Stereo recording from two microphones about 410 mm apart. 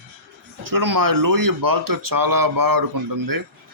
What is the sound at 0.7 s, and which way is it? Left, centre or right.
Speech, right.